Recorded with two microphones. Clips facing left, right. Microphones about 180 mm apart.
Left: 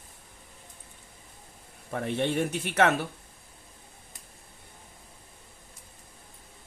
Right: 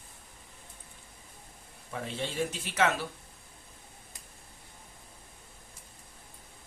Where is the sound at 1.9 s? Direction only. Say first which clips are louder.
Left 8 dB; 60° left (ahead or behind).